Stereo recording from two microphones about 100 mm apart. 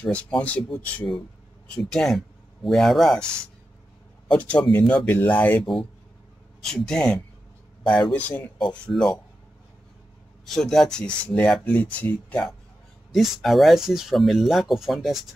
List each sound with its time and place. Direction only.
0.0 s speech: 10° left (ahead or behind)
4.3 s speech: 15° left (ahead or behind)
6.6 s speech: 5° left (ahead or behind)
10.4 s speech: 5° left (ahead or behind)
13.1 s speech: centre (ahead or behind)